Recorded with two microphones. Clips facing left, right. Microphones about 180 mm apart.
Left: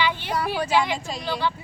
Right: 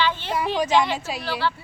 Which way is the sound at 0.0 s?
10° left (ahead or behind).